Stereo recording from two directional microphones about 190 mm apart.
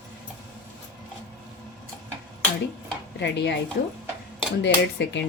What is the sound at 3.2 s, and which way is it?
A woman's voice, 65° left (ahead or behind).